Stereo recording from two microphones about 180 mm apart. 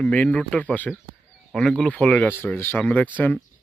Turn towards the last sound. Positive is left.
turn(degrees=10)  # may be behind; listen again after turning